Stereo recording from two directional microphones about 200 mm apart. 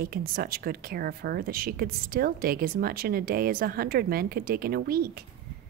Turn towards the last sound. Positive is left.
turn(degrees=-50)  # may be behind; listen again after turning